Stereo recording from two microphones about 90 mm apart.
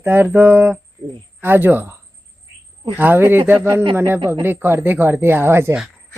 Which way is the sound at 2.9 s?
20° right (ahead or behind).